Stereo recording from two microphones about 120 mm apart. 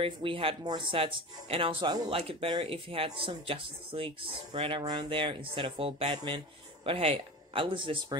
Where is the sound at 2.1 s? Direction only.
50° right (ahead or behind).